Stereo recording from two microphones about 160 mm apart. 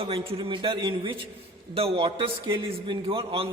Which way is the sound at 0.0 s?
35° right (ahead or behind).